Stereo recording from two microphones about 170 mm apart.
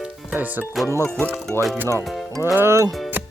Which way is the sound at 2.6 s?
15° right (ahead or behind).